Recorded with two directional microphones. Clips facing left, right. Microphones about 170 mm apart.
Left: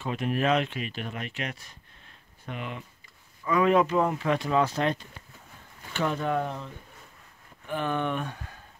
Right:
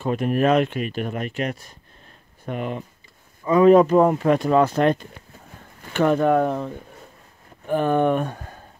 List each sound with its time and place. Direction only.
0.0 s speech: 45° right (ahead or behind)
7.6 s speech: 45° right (ahead or behind)